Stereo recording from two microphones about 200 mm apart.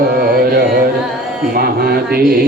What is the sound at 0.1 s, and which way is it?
Carnatic music, 50° right (ahead or behind).